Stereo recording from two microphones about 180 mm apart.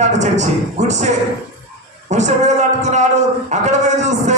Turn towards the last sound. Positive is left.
turn(degrees=-40)  # may be behind; listen again after turning